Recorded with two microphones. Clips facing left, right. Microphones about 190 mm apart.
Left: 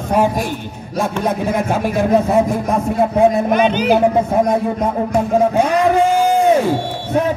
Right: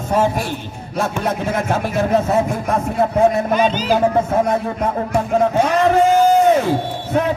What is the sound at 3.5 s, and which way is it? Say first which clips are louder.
Speech: left 3 dB; 60° left (ahead or behind).